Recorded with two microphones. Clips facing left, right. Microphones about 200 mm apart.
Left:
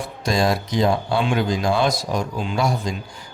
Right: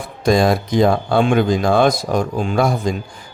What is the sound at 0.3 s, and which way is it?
Speech, 55° right (ahead or behind).